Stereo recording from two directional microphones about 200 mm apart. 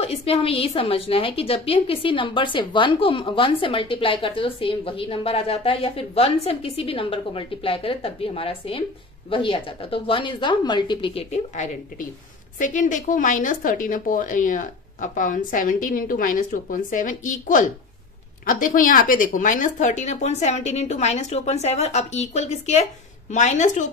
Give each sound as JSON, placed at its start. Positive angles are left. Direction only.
{"t": 0.0, "sound": "a woman's voice", "side_deg": 30}